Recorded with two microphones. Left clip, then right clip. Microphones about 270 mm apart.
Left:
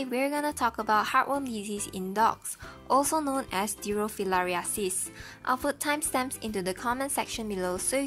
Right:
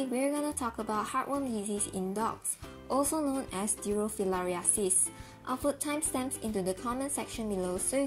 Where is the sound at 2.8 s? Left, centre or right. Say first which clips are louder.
Left 5 dB; left.